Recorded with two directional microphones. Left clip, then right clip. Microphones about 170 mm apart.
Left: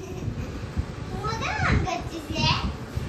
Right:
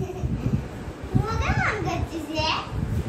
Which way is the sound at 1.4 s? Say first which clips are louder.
Right 1 dB; centre (ahead or behind).